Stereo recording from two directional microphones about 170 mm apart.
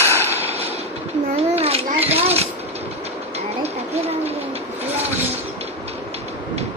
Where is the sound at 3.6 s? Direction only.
40° right (ahead or behind).